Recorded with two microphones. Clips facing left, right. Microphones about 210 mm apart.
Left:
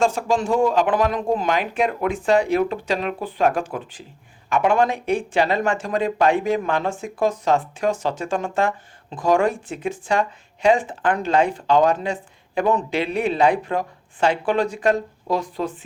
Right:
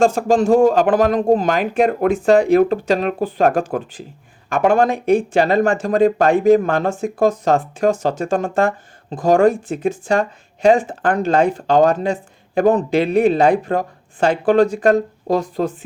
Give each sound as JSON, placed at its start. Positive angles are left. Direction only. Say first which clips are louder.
{"t": 0.0, "sound": "speech", "louder": "right 6 dB", "side_deg": -45}